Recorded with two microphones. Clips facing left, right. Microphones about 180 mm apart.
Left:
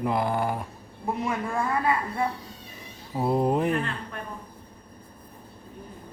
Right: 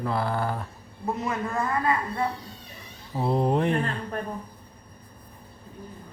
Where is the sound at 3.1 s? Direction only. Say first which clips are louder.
Even; 5° left (ahead or behind).